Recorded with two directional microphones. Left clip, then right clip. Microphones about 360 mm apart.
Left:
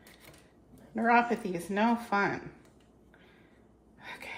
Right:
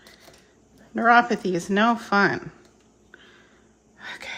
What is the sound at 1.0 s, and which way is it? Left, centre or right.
Speech, right.